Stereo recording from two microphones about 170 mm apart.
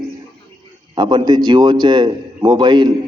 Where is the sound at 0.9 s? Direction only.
25° right (ahead or behind).